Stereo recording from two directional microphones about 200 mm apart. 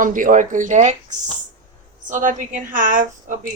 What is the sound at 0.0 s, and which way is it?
Speech, 40° right (ahead or behind).